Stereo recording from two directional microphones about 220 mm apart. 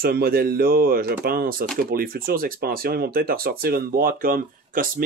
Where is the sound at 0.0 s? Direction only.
45° right (ahead or behind).